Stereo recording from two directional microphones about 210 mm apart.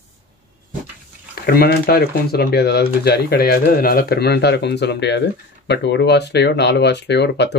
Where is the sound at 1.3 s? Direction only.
45° left (ahead or behind).